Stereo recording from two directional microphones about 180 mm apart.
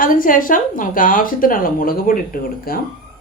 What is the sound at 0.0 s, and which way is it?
A woman's voice, 50° left (ahead or behind).